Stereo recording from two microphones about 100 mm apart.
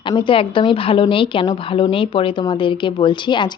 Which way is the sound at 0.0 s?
50° left (ahead or behind).